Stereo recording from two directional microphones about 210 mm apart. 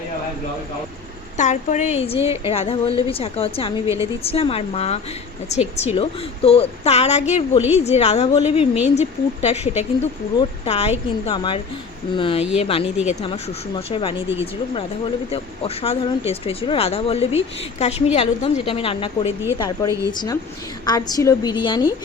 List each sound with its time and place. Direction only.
1.4 s speech: 35° left (ahead or behind)
3.8 s a woman's voice: 15° right (ahead or behind)
4.2 s speech: 25° left (ahead or behind)
8.3 s speech: 20° left (ahead or behind)
9.0 s speech: 30° left (ahead or behind)
15.3 s speech: 25° left (ahead or behind)